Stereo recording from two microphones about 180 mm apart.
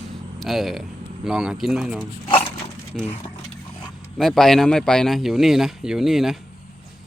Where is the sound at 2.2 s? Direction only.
30° left (ahead or behind).